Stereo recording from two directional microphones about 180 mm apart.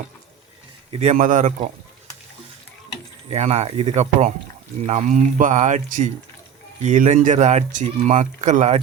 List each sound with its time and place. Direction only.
0.9 s speech: 45° right (ahead or behind)
3.2 s speech: 35° right (ahead or behind)